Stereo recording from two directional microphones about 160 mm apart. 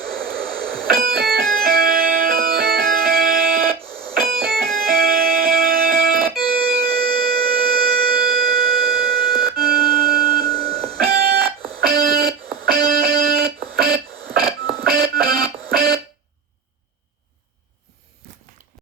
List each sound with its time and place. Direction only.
0.0 s music: 65° right (ahead or behind)